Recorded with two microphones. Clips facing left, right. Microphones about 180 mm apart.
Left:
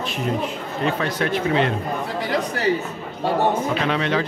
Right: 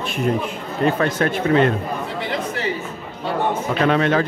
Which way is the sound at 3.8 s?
50° right (ahead or behind).